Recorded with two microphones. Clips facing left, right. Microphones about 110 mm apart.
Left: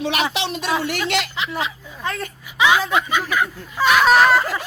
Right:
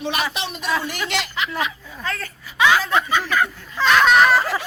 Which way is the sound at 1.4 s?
20° left (ahead or behind).